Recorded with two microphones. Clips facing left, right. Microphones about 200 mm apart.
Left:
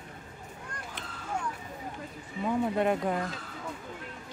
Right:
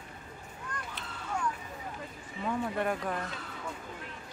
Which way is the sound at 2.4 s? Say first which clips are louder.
Left 5 dB; 20° left (ahead or behind).